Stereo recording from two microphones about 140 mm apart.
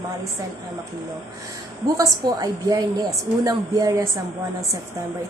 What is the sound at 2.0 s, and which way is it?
A woman's voice, 25° right (ahead or behind).